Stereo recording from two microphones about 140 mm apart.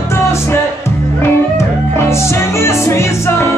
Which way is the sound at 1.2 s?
20° left (ahead or behind).